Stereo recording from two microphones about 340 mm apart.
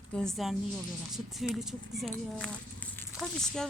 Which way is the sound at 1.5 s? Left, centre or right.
Centre.